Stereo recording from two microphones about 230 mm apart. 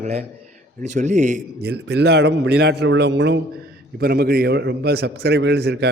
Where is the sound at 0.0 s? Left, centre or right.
Right.